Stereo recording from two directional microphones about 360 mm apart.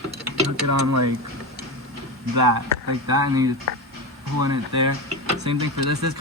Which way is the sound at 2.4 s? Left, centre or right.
Right.